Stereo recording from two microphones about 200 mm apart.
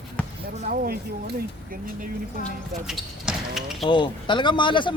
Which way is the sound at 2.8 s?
Centre (ahead or behind).